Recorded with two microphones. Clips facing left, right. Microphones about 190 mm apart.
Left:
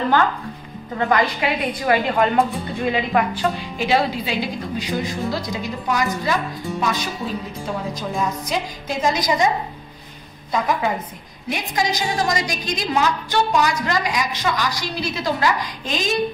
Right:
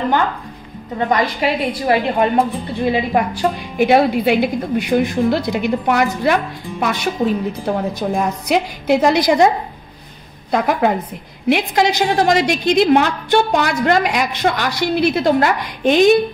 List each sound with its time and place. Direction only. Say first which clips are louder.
0.9 s a woman's voice: right 2 dB; 25° right (ahead or behind)
3.7 s a woman's voice: right 9 dB; 60° right (ahead or behind)
10.5 s a woman's voice: right 5 dB; 70° right (ahead or behind)